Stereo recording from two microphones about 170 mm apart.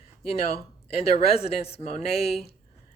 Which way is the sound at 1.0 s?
35° left (ahead or behind).